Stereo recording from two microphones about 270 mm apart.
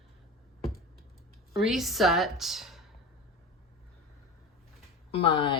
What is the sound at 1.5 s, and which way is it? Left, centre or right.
Speech, centre.